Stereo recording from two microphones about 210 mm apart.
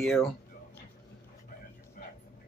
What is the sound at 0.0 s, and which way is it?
Speech, centre (ahead or behind).